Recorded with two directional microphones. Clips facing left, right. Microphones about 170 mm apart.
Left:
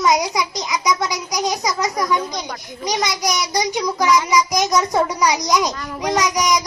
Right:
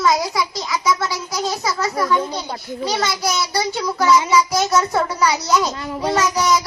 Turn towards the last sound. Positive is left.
turn(degrees=15)  # may be behind; listen again after turning